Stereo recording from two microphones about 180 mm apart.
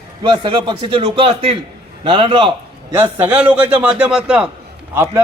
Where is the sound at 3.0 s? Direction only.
10° right (ahead or behind).